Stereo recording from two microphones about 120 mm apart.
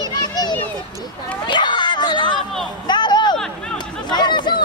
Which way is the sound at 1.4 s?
40° left (ahead or behind).